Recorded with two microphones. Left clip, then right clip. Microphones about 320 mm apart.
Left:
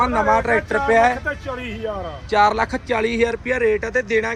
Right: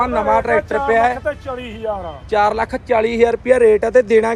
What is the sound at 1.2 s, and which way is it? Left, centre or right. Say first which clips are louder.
Speech: right 3 dB; right.